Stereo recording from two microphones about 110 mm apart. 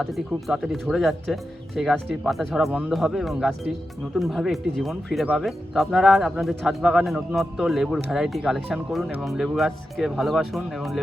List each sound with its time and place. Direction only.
0.0 s speech: centre (ahead or behind)